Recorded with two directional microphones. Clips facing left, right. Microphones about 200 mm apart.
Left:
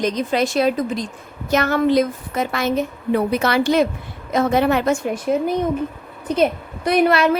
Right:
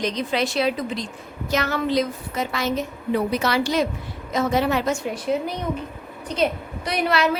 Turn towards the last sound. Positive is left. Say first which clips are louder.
# left 7 dB
turn(degrees=50)  # may be behind; listen again after turning